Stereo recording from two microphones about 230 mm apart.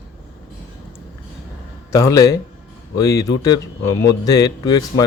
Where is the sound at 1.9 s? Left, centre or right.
Centre.